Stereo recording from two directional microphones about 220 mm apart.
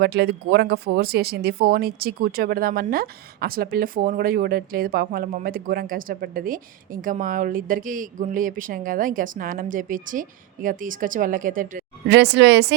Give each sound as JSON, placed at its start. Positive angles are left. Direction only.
{"t": 0.0, "sound": "speech", "side_deg": -50}